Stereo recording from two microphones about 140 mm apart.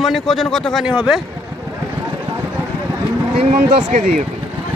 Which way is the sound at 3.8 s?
70° right (ahead or behind).